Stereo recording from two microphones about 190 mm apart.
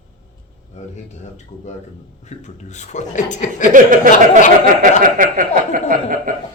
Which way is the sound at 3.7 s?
45° right (ahead or behind).